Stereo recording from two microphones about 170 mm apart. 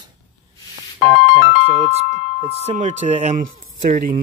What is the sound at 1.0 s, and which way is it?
Speech, 35° right (ahead or behind).